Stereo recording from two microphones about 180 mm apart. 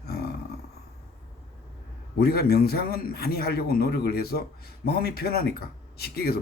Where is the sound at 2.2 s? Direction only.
60° left (ahead or behind).